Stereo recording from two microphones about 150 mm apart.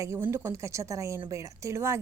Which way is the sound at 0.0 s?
20° right (ahead or behind).